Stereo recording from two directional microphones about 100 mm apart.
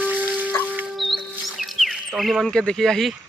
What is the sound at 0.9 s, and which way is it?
Music, centre (ahead or behind).